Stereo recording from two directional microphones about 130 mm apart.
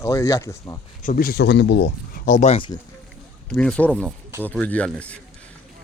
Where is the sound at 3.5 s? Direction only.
5° left (ahead or behind).